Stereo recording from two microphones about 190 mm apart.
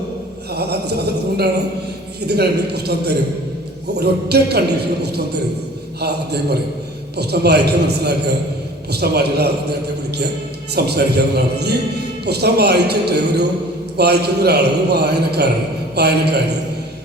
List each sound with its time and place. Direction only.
0.5 s a man's voice: 60° right (ahead or behind)
10.8 s a man's voice: 60° right (ahead or behind)